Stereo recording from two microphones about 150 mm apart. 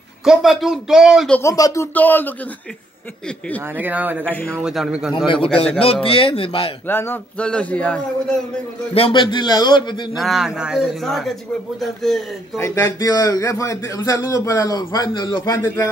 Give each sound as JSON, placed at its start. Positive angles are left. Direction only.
{"t": 0.2, "sound": "speech", "side_deg": 0}
{"t": 1.4, "sound": "a man's voice", "side_deg": 20}
{"t": 3.7, "sound": "a man's voice", "side_deg": -10}
{"t": 4.3, "sound": "a man's voice", "side_deg": 10}
{"t": 4.6, "sound": "speech", "side_deg": -5}
{"t": 5.1, "sound": "a man's voice", "side_deg": 35}
{"t": 6.9, "sound": "a man's voice", "side_deg": 15}
{"t": 8.9, "sound": "a man's voice", "side_deg": 35}
{"t": 10.1, "sound": "speech", "side_deg": 0}
{"t": 12.5, "sound": "speech", "side_deg": 20}